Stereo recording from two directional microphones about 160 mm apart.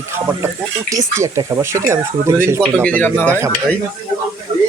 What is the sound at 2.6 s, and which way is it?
Speech, 5° left (ahead or behind).